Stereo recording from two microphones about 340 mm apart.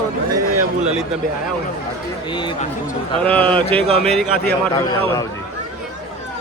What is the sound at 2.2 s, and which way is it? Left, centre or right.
Speech, centre.